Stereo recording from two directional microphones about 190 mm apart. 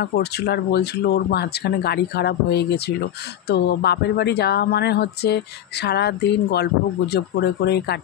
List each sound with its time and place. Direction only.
0.0 s speech: 60° left (ahead or behind)